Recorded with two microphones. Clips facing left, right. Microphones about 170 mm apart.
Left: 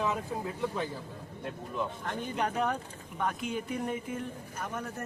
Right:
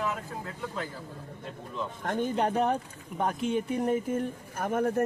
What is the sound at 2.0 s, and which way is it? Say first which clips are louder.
Speech: right 10 dB; 35° right (ahead or behind).